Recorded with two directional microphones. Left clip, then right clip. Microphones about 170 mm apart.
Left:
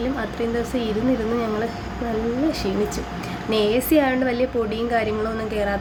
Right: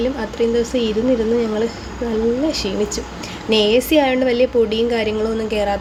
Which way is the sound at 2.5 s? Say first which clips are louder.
Right 3 dB; 5° right (ahead or behind).